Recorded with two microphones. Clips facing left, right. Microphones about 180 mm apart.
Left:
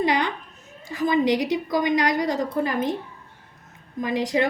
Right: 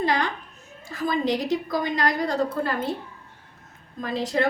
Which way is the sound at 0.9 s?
15° left (ahead or behind).